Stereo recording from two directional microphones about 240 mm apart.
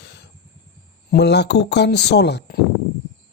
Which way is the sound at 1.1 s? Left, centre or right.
Left.